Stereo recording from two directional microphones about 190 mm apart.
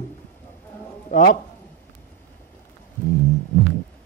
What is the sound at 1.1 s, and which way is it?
Speech, 45° left (ahead or behind).